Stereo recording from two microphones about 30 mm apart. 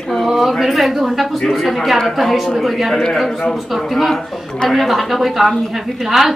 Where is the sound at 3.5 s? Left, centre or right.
Centre.